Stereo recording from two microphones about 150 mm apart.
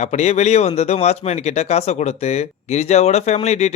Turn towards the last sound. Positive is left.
turn(degrees=45)  # may be behind; listen again after turning